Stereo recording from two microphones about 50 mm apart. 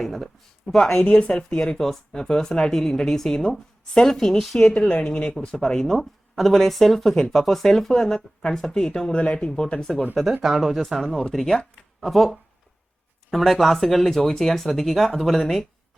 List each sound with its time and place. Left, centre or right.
0.0 s speech: centre
4.5 s a woman's voice: centre
5.5 s a woman's voice: centre
10.4 s speech: centre